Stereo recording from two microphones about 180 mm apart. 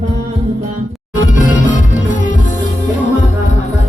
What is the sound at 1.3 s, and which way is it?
Music, 45° left (ahead or behind).